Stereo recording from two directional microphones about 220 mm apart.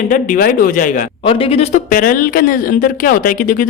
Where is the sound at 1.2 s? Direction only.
25° left (ahead or behind).